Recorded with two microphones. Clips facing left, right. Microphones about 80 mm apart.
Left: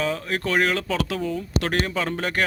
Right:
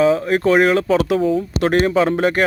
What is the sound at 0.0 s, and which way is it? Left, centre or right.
Speech, right.